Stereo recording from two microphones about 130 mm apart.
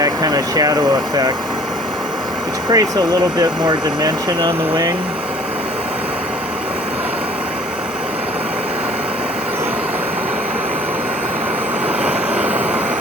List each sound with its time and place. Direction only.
0.0 s speech: 30° right (ahead or behind)
2.6 s speech: 30° right (ahead or behind)
12.0 s vehicle: 10° right (ahead or behind)